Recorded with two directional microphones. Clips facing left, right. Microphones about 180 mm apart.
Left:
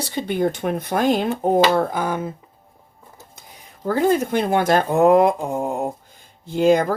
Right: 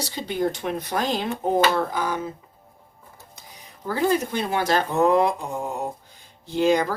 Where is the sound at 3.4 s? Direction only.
50° left (ahead or behind).